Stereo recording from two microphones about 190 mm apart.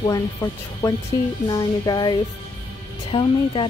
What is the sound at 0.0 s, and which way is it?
Speech, 20° left (ahead or behind).